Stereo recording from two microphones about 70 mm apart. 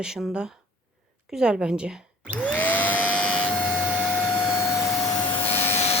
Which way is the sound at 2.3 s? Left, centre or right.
Left.